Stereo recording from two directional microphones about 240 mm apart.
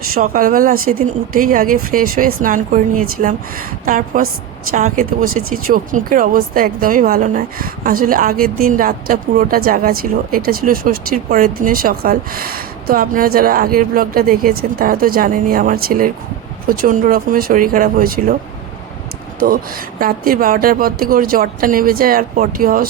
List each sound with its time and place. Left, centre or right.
0.1 s speech: right
20.0 s speech: right